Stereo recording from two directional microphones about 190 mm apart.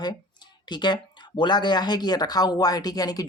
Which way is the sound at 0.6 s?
25° left (ahead or behind).